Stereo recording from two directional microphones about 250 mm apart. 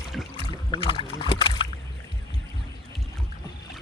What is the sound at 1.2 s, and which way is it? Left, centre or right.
Rowboat, centre.